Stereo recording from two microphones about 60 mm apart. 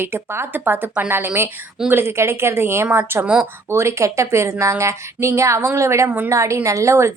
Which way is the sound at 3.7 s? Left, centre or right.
Right.